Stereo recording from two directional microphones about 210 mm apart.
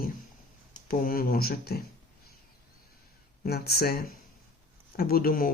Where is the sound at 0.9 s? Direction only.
45° left (ahead or behind).